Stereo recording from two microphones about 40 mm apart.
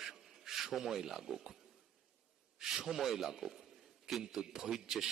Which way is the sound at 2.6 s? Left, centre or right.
Centre.